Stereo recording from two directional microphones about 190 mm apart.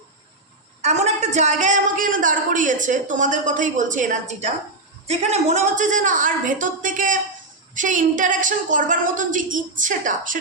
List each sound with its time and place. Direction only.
0.8 s a woman's voice: 35° right (ahead or behind)